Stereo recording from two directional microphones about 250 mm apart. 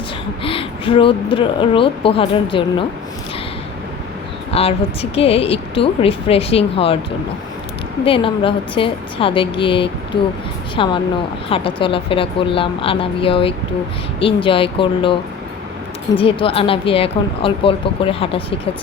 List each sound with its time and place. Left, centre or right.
0.4 s speech: left
4.5 s speech: left
8.0 s speech: left
16.1 s speech: left